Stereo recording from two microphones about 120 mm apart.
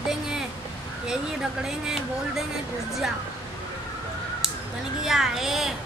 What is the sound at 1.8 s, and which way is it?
Speech, 5° right (ahead or behind).